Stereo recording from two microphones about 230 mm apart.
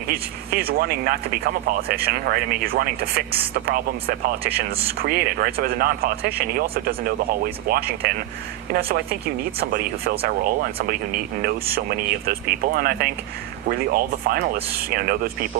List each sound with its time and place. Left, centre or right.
0.1 s speech: right